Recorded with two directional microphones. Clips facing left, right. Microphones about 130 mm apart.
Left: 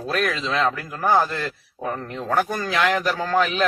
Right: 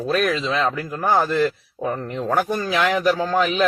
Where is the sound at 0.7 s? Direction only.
20° right (ahead or behind).